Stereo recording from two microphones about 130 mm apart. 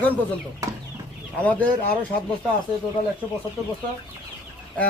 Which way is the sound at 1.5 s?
10° left (ahead or behind).